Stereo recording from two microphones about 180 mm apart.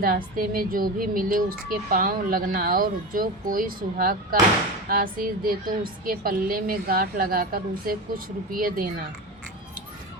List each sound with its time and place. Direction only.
0.0 s speech: 55° right (ahead or behind)